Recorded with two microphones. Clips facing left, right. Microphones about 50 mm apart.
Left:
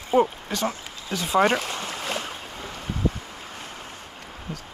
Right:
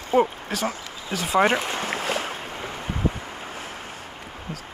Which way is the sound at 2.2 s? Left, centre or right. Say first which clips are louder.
Right 4 dB; right.